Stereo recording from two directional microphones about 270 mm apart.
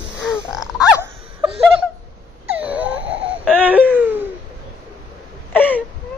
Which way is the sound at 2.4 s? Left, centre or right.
Centre.